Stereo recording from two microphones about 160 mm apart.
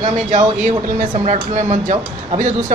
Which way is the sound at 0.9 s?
45° right (ahead or behind).